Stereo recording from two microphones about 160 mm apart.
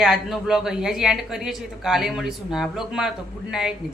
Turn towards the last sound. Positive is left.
turn(degrees=-5)  # may be behind; listen again after turning